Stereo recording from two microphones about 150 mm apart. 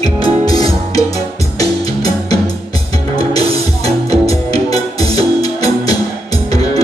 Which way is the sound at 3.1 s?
25° left (ahead or behind).